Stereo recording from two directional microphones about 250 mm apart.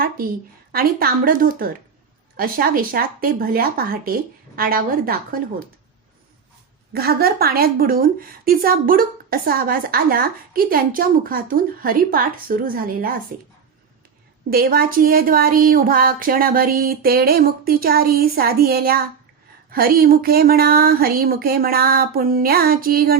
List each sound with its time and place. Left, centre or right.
0.7 s a woman's voice: right
6.9 s a woman's voice: right
14.5 s a woman's voice: right